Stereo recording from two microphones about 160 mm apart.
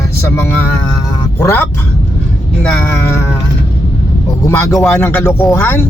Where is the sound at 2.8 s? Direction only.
15° left (ahead or behind).